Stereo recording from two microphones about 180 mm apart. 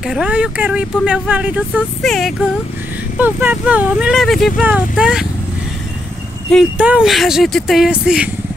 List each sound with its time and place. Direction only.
0.0 s speech: 5° right (ahead or behind)
3.2 s speech: 10° right (ahead or behind)
6.8 s speech: 5° right (ahead or behind)